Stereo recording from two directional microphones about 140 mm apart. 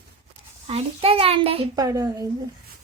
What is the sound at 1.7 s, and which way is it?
Speech, 25° right (ahead or behind).